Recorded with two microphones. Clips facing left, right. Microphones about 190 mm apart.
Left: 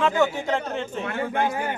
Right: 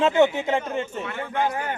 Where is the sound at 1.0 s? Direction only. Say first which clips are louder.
Left 4 dB; 50° left (ahead or behind).